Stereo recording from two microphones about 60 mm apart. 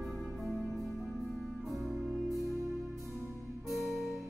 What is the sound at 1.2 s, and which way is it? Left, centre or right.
Music, centre.